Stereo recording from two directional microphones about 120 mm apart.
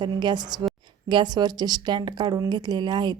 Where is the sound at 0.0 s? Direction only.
40° right (ahead or behind).